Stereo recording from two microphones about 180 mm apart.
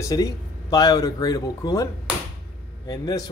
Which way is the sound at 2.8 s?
20° left (ahead or behind).